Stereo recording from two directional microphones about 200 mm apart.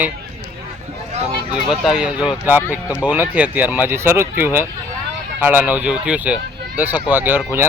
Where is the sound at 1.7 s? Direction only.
5° right (ahead or behind).